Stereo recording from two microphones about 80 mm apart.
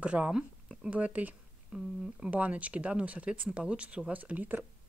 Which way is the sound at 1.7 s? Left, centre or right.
Centre.